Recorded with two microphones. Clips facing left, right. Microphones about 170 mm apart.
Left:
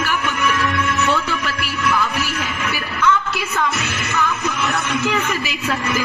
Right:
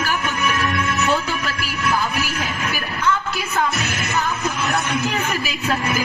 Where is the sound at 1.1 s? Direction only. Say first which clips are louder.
Left 1 dB; 35° right (ahead or behind).